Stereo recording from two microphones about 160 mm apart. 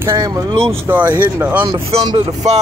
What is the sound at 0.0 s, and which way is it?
Speech, 20° right (ahead or behind).